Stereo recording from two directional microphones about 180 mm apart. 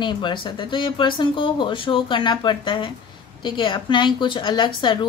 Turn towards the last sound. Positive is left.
turn(degrees=25)  # may be behind; listen again after turning